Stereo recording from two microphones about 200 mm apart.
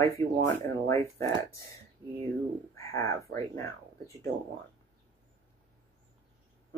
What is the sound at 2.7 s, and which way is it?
Speech, 15° left (ahead or behind).